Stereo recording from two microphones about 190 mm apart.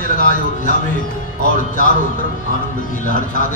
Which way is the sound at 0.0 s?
45° left (ahead or behind).